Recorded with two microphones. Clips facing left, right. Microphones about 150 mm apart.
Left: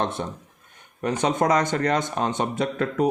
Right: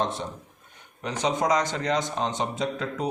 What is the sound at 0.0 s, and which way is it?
A man's voice, 55° left (ahead or behind).